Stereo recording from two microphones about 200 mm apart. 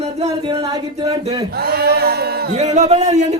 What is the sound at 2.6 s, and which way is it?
Speech, 35° right (ahead or behind).